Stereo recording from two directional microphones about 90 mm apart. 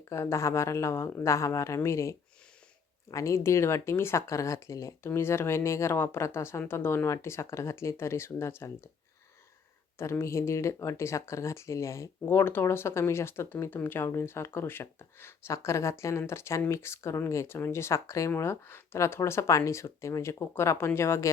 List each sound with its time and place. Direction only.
0.1 s speech: 35° left (ahead or behind)
10.0 s speech: 30° left (ahead or behind)